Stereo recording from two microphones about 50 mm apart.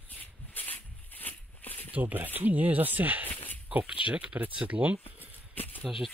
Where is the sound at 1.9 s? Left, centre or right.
Right.